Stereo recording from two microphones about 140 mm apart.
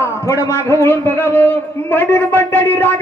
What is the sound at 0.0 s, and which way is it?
A man's voice, 20° left (ahead or behind).